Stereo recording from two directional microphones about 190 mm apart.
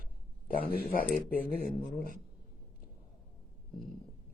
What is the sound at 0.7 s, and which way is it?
Speech, 50° left (ahead or behind).